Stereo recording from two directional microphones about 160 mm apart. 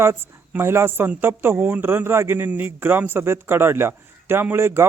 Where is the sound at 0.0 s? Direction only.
15° right (ahead or behind).